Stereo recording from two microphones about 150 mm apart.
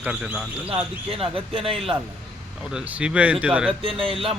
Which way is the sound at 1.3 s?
40° right (ahead or behind).